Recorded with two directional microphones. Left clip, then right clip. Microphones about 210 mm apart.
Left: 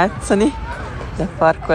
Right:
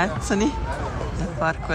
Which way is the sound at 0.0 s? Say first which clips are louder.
Left 7 dB; 5° right (ahead or behind).